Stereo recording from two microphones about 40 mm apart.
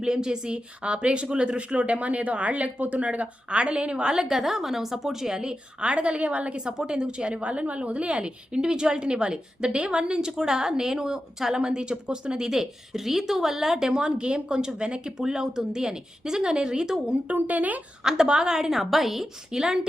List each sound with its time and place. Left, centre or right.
0.0 s speech: centre
4.2 s speech: centre
7.4 s speech: right
12.5 s speech: centre
14.0 s speech: right
17.2 s speech: right
18.0 s speech: centre
19.5 s speech: centre